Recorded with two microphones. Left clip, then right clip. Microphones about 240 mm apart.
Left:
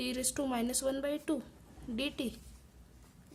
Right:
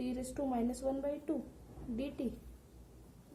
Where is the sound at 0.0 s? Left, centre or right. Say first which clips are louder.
Left 3 dB; left.